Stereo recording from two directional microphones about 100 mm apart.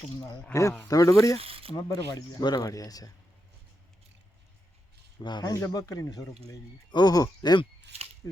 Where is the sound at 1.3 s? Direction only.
70° right (ahead or behind).